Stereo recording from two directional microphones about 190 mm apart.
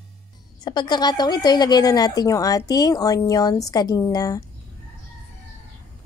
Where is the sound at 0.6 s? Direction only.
20° left (ahead or behind).